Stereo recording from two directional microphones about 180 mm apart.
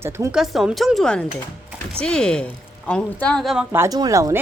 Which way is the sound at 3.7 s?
15° right (ahead or behind).